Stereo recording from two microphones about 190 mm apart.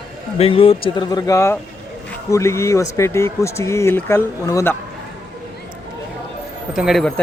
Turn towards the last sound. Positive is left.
turn(degrees=0)  # may be behind; listen again after turning